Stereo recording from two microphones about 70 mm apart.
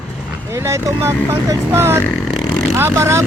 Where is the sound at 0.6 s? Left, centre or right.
Right.